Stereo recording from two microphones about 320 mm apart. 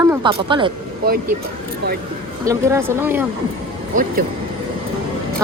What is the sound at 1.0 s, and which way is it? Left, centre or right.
Speech, right.